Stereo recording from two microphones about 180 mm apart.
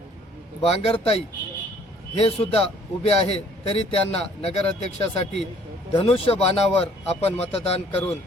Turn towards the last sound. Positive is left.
turn(degrees=35)  # may be behind; listen again after turning